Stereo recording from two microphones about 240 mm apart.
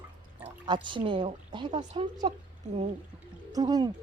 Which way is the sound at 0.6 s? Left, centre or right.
Centre.